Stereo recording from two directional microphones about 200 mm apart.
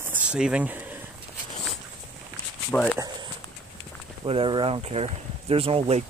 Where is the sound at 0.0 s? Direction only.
5° right (ahead or behind).